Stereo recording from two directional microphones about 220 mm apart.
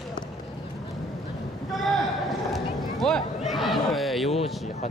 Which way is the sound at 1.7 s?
Centre (ahead or behind).